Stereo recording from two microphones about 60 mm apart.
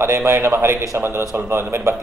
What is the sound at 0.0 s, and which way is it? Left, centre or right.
Mantra, right.